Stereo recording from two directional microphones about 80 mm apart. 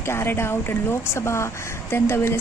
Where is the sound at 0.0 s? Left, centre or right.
Left.